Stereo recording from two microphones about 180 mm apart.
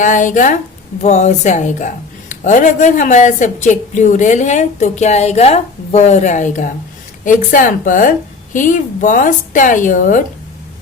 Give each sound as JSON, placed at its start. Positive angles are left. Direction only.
{"t": 0.0, "sound": "a woman's voice", "side_deg": 45}